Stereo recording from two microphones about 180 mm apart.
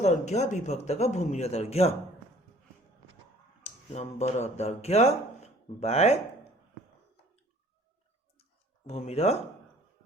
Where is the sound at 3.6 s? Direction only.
40° left (ahead or behind).